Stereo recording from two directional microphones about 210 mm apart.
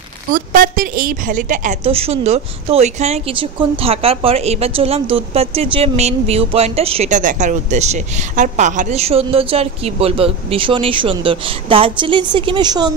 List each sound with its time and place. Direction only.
0.3 s a woman's voice: 40° right (ahead or behind); by 12.9 s 20° right (ahead or behind)